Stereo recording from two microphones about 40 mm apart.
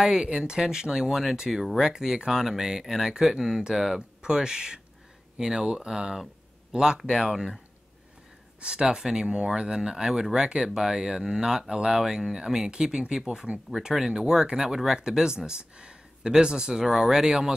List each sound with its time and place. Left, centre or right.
0.0 s speech: centre
8.5 s speech: right